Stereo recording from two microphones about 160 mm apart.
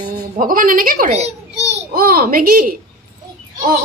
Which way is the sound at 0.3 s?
60° right (ahead or behind).